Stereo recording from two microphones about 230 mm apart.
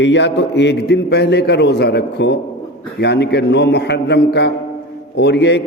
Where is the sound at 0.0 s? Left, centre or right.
Left.